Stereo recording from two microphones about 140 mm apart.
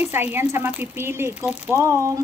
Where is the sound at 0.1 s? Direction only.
15° right (ahead or behind).